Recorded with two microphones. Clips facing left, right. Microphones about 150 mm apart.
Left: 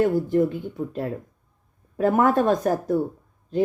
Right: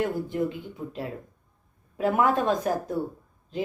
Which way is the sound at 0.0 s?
45° left (ahead or behind).